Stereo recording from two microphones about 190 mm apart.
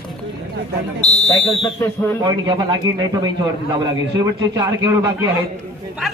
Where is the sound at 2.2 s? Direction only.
20° right (ahead or behind).